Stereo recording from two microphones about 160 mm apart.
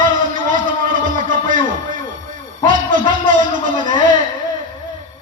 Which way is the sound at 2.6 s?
55° right (ahead or behind).